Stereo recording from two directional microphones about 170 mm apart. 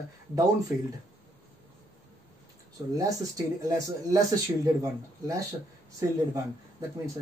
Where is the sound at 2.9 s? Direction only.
20° right (ahead or behind).